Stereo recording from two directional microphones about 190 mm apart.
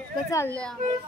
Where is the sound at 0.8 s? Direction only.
45° right (ahead or behind).